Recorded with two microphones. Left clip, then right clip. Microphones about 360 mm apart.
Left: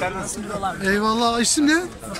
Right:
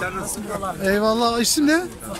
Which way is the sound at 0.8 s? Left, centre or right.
Centre.